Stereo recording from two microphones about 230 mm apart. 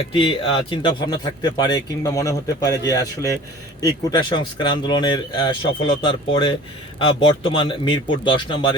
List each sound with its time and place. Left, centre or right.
0.1 s speech: left